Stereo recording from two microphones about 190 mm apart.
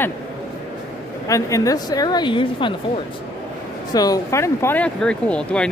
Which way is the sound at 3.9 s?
20° left (ahead or behind).